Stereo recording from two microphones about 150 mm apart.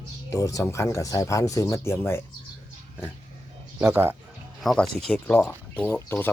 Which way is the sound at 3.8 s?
15° right (ahead or behind).